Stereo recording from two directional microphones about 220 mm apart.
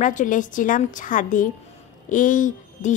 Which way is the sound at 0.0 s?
35° left (ahead or behind).